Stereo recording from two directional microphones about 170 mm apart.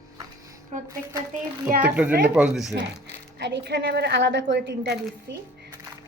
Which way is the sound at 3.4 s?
75° right (ahead or behind).